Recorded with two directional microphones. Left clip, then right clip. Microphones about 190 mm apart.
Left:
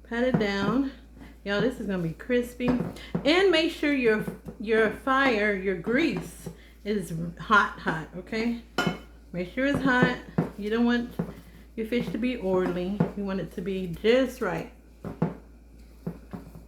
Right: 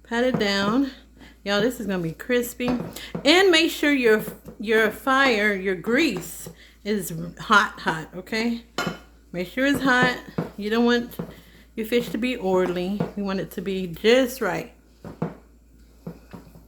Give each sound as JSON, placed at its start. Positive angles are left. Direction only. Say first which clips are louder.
{"t": 0.1, "sound": "speech", "louder": "right 4 dB", "side_deg": -60}
{"t": 6.5, "sound": "speech", "louder": "even", "side_deg": 5}
{"t": 6.8, "sound": "speech", "louder": "right 3 dB", "side_deg": -55}